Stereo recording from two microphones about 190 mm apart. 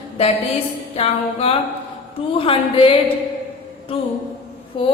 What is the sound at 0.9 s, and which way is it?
Music, 30° left (ahead or behind).